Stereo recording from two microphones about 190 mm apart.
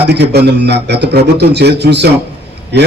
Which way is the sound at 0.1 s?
60° right (ahead or behind).